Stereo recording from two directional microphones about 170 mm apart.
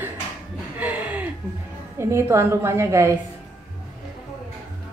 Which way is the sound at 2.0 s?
15° right (ahead or behind).